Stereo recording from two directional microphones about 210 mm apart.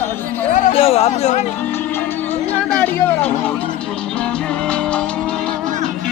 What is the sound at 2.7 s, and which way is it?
Speech, 10° left (ahead or behind).